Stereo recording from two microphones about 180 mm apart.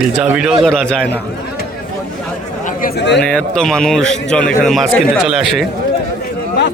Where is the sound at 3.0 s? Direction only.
70° left (ahead or behind).